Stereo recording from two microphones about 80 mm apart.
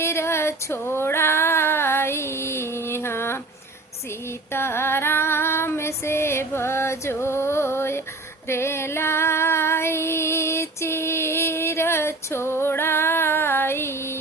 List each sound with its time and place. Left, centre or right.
0.0 s female singing: left
4.5 s female singing: left